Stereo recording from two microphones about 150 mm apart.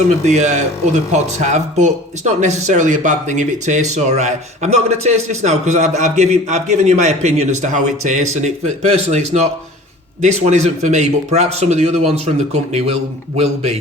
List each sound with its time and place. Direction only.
0.3 s speech: 50° right (ahead or behind)